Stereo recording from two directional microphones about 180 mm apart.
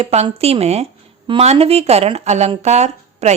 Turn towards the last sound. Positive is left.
turn(degrees=-40)  # may be behind; listen again after turning